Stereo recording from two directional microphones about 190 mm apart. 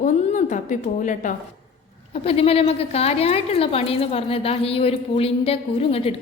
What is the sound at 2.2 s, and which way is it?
A woman's voice, 30° left (ahead or behind).